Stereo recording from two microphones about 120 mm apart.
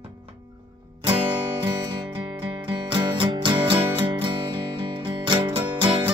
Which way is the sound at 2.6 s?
40° right (ahead or behind).